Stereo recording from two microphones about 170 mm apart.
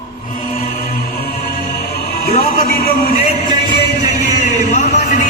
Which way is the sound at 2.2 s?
60° left (ahead or behind).